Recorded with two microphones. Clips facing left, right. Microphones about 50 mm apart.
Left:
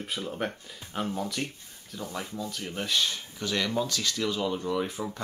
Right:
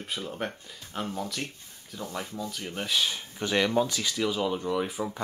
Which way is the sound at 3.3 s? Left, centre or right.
Right.